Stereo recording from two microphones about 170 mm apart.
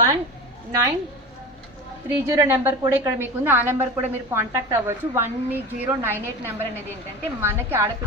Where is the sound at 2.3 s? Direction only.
15° right (ahead or behind).